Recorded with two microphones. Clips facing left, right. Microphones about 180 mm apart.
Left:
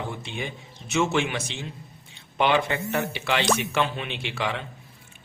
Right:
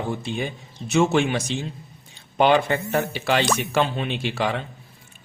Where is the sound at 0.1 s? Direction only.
35° right (ahead or behind).